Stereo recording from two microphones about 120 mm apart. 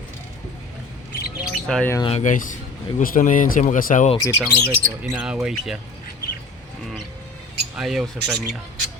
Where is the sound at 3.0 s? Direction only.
90° left.